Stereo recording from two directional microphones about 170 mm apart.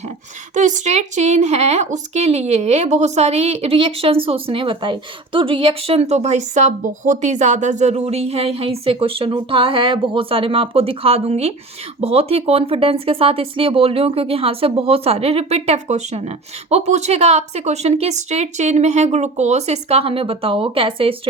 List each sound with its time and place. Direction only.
0.5 s a woman's voice: 45° right (ahead or behind)